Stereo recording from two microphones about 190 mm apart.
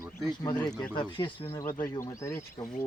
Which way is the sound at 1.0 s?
25° left (ahead or behind).